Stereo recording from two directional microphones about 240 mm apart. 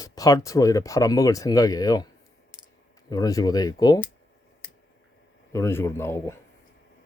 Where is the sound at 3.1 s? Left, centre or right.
Centre.